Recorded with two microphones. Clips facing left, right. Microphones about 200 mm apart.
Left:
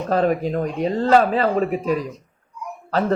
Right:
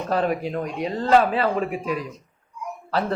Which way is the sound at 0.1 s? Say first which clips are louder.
Left 4 dB; 40° left (ahead or behind).